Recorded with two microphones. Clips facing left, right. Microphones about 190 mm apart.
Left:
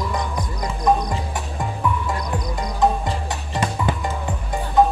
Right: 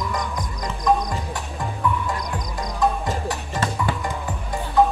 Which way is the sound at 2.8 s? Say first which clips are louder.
Left 2 dB; 20° left (ahead or behind).